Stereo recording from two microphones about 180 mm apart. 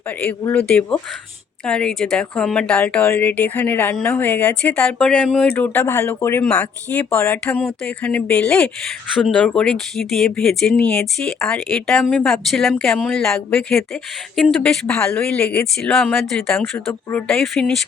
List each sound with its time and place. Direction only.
0.2 s speech: 10° left (ahead or behind)